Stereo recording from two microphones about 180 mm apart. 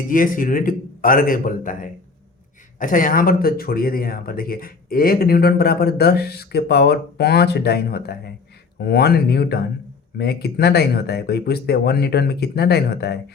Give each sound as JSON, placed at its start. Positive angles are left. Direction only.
{"t": 0.1, "sound": "a man's voice", "side_deg": 50}